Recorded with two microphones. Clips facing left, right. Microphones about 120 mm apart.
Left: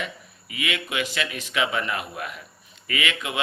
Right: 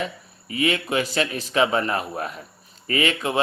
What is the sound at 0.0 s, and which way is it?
Speech, 35° right (ahead or behind).